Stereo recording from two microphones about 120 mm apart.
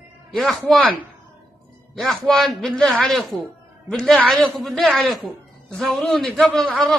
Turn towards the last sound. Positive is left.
turn(degrees=0)  # may be behind; listen again after turning